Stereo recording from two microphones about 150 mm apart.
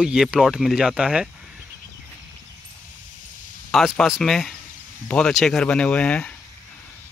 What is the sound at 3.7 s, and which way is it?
Speech, centre (ahead or behind).